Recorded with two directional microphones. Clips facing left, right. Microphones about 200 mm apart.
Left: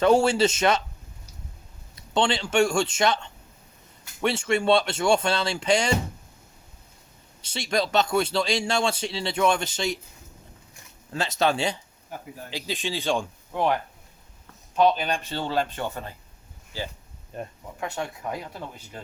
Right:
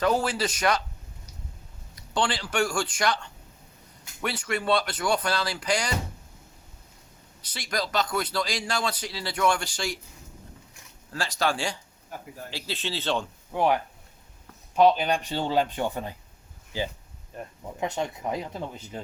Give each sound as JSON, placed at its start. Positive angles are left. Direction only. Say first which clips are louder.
{"t": 0.0, "sound": "speech", "louder": "left 6 dB", "side_deg": 25}
{"t": 2.0, "sound": "speech", "louder": "left 4 dB", "side_deg": 25}
{"t": 7.4, "sound": "speech", "louder": "left 5 dB", "side_deg": 25}
{"t": 11.1, "sound": "speech", "louder": "left 3 dB", "side_deg": 20}
{"t": 13.5, "sound": "speech", "louder": "right 1 dB", "side_deg": -10}
{"t": 14.8, "sound": "speech", "louder": "right 1 dB", "side_deg": -10}